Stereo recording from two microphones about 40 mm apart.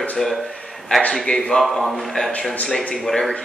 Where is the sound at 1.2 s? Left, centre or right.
Left.